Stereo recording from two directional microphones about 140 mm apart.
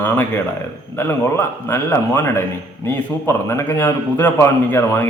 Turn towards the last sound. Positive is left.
turn(degrees=20)  # may be behind; listen again after turning